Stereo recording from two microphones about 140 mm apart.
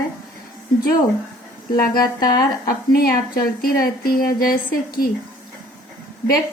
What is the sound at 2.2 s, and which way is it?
Speech, 25° left (ahead or behind).